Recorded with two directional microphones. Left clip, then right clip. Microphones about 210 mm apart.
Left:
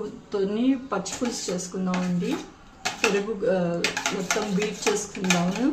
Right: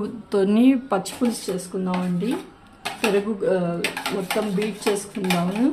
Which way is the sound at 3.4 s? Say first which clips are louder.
Right 2 dB; 40° right (ahead or behind).